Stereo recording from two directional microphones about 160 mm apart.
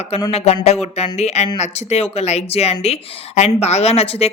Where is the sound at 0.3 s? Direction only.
40° left (ahead or behind).